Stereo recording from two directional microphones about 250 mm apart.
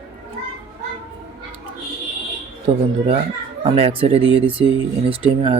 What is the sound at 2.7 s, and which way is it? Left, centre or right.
Speech, right.